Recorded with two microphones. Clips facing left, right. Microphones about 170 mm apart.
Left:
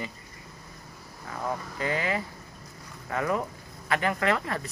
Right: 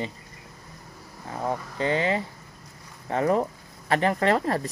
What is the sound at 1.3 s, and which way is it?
Speech, 30° right (ahead or behind).